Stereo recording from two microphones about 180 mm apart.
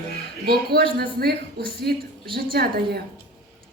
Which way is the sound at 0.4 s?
60° right (ahead or behind).